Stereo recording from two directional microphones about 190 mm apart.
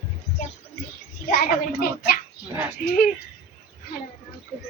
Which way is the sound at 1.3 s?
50° left (ahead or behind).